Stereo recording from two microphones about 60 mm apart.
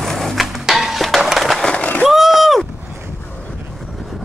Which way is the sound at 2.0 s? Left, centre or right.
Centre.